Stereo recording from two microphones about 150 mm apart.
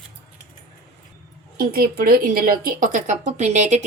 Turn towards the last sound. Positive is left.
turn(degrees=-50)  # may be behind; listen again after turning